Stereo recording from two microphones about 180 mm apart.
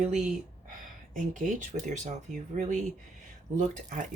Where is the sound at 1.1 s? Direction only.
45° right (ahead or behind).